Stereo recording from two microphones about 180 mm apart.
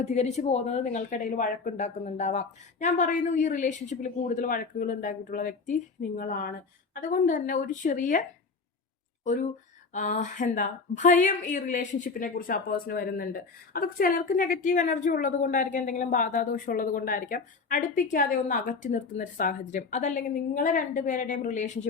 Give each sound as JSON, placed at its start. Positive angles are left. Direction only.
{"t": 0.0, "sound": "a woman's voice", "side_deg": 40}
{"t": 9.2, "sound": "a woman's voice", "side_deg": 40}